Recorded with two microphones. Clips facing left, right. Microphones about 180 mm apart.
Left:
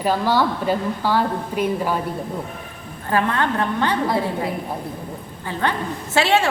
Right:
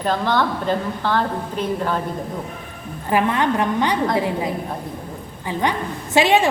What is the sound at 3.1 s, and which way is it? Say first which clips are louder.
Speech: right 2 dB; 15° right (ahead or behind).